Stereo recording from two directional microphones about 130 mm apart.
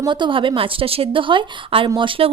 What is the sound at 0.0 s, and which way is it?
Speech, 35° right (ahead or behind).